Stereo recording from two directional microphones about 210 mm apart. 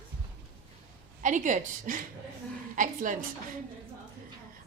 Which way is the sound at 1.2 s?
35° right (ahead or behind).